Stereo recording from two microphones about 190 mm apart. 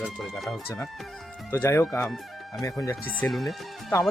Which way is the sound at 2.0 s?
Centre (ahead or behind).